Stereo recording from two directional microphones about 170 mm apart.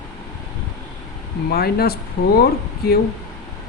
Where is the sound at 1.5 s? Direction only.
65° left (ahead or behind).